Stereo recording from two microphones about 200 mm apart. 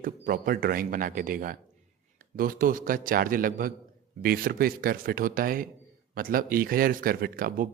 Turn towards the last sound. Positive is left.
turn(degrees=-45)  # may be behind; listen again after turning